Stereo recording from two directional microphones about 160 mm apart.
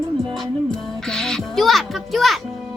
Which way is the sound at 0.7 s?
5° left (ahead or behind).